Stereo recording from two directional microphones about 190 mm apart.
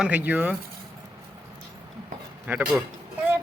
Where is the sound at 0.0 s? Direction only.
5° right (ahead or behind).